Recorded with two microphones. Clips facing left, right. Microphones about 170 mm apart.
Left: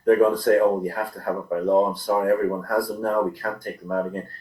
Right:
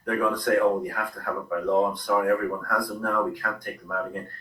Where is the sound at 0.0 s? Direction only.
30° left (ahead or behind).